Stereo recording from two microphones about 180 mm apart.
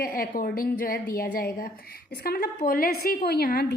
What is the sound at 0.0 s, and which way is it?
A woman's voice, 55° left (ahead or behind).